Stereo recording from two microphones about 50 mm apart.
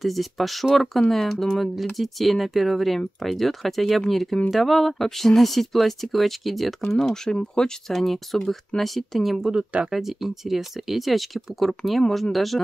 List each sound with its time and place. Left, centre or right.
0.0 s speech: centre
7.3 s speech: centre
7.9 s speech: centre
9.4 s speech: centre
9.8 s speech: centre